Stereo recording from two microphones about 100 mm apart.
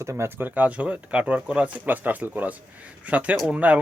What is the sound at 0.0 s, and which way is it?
Speech, 30° right (ahead or behind).